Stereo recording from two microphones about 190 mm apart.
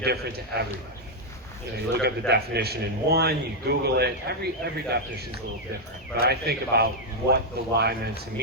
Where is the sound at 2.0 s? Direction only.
60° right (ahead or behind).